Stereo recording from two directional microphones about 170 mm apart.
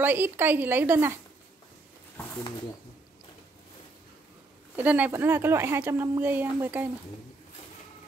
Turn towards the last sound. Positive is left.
turn(degrees=-10)  # may be behind; listen again after turning